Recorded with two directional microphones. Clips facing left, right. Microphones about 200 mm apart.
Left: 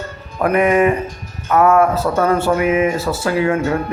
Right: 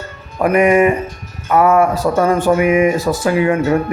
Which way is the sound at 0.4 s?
10° right (ahead or behind).